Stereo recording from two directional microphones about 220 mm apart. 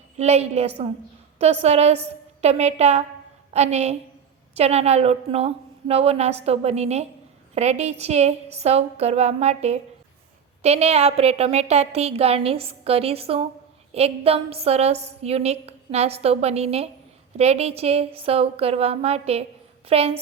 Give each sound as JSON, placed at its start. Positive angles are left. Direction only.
{"t": 0.2, "sound": "a woman's voice", "side_deg": -30}